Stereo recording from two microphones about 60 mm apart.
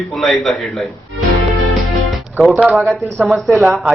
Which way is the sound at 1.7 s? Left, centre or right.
Centre.